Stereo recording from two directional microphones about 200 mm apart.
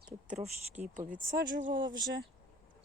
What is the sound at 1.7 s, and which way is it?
Speech, 20° right (ahead or behind).